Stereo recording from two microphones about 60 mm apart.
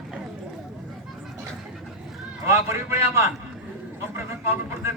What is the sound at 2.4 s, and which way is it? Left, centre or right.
Speech, right.